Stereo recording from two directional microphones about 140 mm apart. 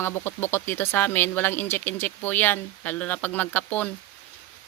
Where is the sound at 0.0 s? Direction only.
15° left (ahead or behind).